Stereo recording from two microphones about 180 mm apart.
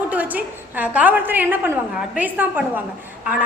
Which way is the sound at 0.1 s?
10° right (ahead or behind).